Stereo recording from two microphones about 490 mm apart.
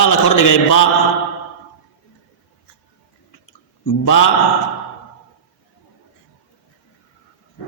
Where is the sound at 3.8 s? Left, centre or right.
Left.